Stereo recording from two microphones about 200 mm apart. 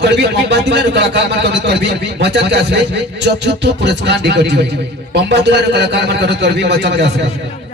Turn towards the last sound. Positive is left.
turn(degrees=-60)  # may be behind; listen again after turning